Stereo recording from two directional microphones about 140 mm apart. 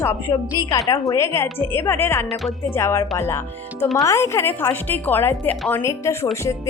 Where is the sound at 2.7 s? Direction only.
20° left (ahead or behind).